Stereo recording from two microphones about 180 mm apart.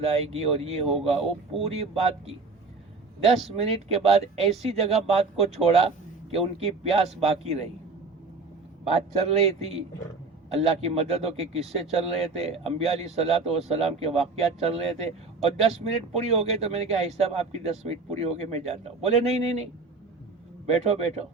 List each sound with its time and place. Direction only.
0.0 s speech: 35° right (ahead or behind)
8.9 s speech: 35° right (ahead or behind)
20.7 s speech: 35° right (ahead or behind)